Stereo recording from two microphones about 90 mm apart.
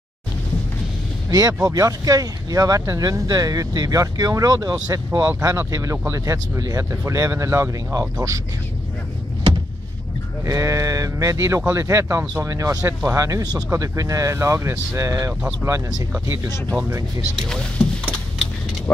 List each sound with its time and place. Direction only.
1.3 s speech: 45° right (ahead or behind)
10.4 s speech: 35° right (ahead or behind)
17.4 s speech: 10° left (ahead or behind)